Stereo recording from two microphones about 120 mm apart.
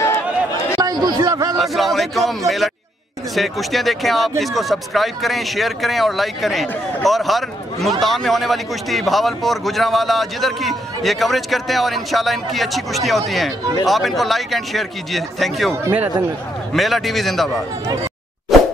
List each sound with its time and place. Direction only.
0.7 s chatter: 35° right (ahead or behind)
1.6 s speech: centre (ahead or behind)
16.7 s speech: centre (ahead or behind)
18.5 s plop: centre (ahead or behind)